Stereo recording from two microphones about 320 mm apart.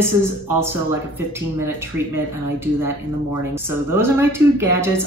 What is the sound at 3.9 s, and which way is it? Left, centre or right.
A woman's voice, centre.